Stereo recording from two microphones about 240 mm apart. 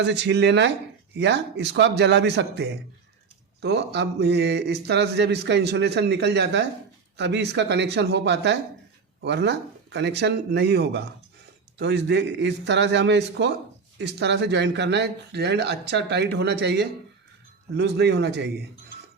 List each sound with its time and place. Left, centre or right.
0.0 s speech: right